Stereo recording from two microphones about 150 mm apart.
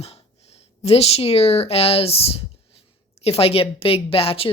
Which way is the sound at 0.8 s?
45° left (ahead or behind).